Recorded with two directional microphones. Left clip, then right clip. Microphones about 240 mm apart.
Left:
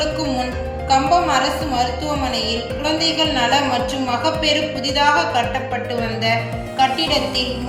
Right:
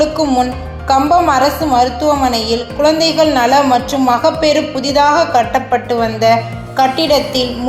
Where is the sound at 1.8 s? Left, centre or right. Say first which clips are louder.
Right 10 dB; right.